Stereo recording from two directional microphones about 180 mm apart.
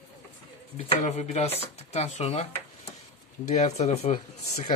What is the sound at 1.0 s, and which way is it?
Speech, 40° left (ahead or behind).